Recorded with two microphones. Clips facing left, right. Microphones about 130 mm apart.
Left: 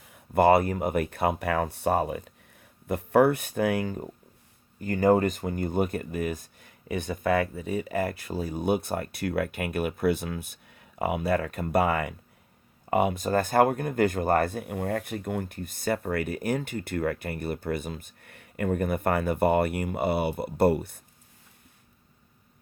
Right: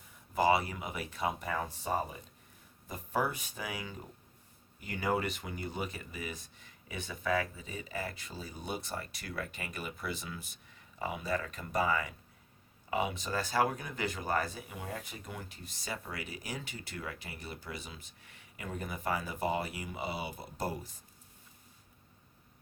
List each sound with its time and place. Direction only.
0.0 s speech: 65° left (ahead or behind)